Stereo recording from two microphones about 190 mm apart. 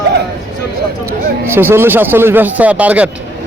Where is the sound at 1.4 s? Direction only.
10° right (ahead or behind).